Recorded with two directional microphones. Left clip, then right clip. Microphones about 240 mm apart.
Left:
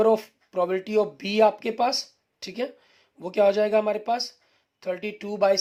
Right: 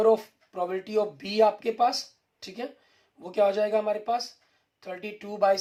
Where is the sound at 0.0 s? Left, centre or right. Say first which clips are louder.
Left 1 dB; left.